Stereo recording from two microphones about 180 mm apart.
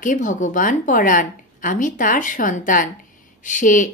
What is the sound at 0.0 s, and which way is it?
A woman's voice, 45° left (ahead or behind).